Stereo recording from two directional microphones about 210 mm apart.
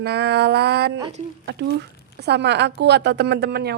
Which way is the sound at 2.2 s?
55° right (ahead or behind).